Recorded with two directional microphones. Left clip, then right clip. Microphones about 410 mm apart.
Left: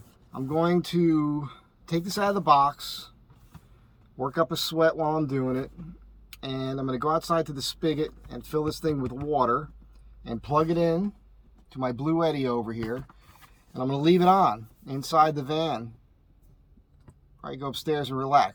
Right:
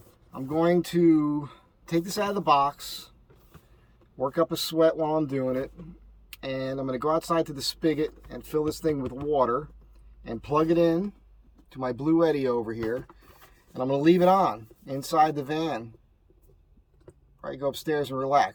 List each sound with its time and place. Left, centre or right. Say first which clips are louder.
0.6 s speech: right 3 dB; centre
4.2 s speech: right 1 dB; centre
17.7 s speech: right 1 dB; centre